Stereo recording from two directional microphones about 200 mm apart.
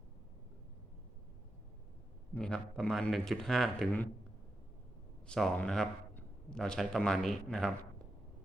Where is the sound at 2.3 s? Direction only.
5° left (ahead or behind).